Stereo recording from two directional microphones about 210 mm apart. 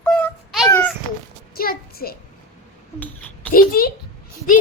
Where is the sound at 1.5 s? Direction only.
45° left (ahead or behind).